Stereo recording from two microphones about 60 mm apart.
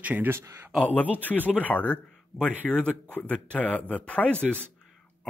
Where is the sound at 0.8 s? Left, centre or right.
Left.